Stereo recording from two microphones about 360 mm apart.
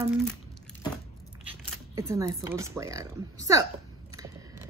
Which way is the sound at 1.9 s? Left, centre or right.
Centre.